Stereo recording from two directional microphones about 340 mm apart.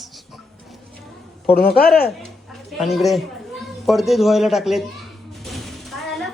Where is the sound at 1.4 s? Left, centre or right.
Left.